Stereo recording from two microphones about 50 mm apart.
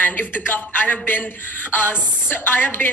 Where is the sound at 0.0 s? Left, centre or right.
Left.